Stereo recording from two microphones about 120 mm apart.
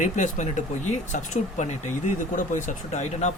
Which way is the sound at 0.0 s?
90° left.